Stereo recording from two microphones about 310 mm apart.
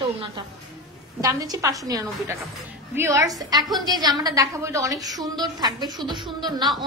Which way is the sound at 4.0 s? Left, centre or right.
Centre.